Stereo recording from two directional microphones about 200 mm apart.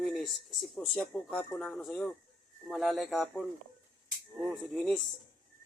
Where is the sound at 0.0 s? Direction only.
Centre (ahead or behind).